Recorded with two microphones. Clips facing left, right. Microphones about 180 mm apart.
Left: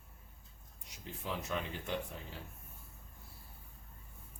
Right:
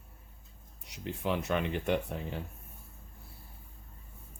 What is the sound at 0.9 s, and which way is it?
Speech, 70° right (ahead or behind).